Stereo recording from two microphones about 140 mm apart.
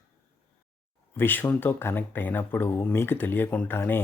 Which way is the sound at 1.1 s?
15° left (ahead or behind).